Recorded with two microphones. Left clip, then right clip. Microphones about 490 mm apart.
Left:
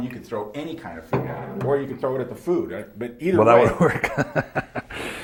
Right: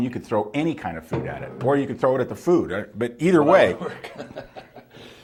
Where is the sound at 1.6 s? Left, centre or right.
Right.